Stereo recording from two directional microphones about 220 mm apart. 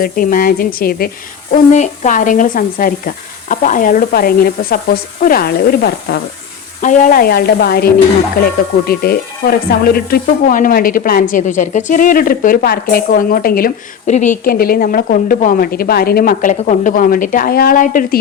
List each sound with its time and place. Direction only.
0.0 s speech: 40° left (ahead or behind)
6.8 s speech: 35° left (ahead or behind)